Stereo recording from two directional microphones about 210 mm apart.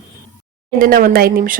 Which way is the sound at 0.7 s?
45° right (ahead or behind).